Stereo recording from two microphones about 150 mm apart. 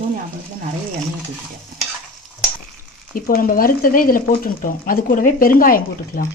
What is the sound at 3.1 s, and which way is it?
Speech, 75° left (ahead or behind).